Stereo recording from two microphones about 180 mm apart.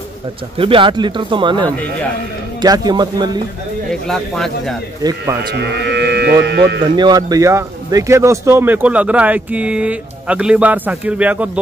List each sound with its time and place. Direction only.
0.6 s speech: 30° right (ahead or behind)
4.1 s speech: 5° left (ahead or behind)
5.5 s speech: 70° right (ahead or behind)
7.0 s speech: 20° right (ahead or behind)